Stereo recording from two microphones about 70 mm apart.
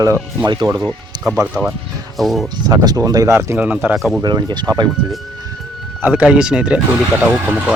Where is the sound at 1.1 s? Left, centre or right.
Right.